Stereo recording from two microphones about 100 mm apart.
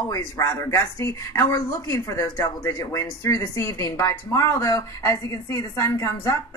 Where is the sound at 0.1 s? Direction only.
30° left (ahead or behind).